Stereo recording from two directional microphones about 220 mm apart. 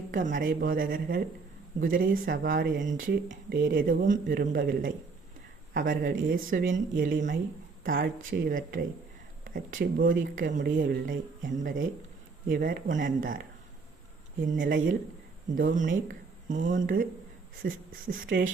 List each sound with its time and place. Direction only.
0.1 s speech: 35° right (ahead or behind)